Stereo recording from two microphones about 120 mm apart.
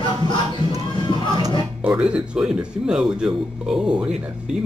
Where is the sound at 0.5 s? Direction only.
30° right (ahead or behind).